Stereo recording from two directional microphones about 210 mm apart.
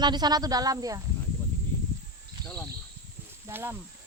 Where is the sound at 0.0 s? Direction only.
20° right (ahead or behind).